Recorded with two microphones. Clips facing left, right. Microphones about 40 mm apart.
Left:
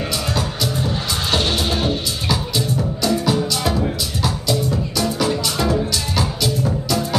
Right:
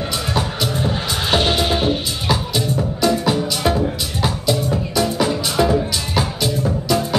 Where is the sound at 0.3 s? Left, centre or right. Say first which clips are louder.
Right 1 dB; right.